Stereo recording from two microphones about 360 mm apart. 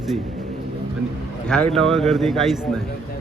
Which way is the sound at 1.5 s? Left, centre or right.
Centre.